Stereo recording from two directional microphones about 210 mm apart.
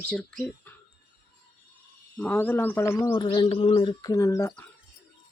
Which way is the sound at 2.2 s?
10° left (ahead or behind).